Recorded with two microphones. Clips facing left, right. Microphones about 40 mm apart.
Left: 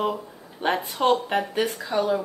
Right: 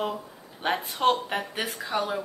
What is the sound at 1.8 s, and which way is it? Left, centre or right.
Speech, centre.